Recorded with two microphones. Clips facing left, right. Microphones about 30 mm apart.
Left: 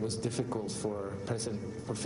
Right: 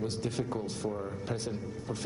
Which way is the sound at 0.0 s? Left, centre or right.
Centre.